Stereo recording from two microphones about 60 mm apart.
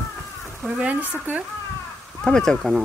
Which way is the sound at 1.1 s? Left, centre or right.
Right.